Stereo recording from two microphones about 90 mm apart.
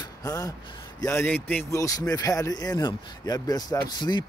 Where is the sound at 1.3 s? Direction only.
20° left (ahead or behind).